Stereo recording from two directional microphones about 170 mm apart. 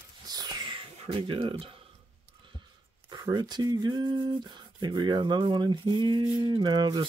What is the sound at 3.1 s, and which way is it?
Speech, 25° right (ahead or behind).